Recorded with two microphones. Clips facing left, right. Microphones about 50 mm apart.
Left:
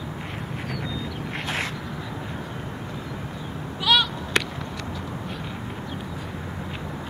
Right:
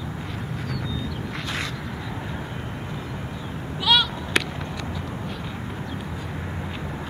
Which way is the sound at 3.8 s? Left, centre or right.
Centre.